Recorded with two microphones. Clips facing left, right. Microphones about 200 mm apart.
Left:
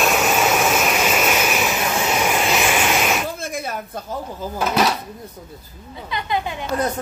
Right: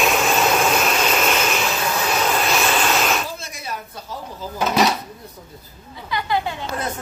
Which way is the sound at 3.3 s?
50° left (ahead or behind).